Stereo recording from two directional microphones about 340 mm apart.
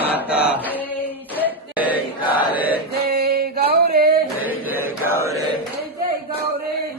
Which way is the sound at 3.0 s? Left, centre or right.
Right.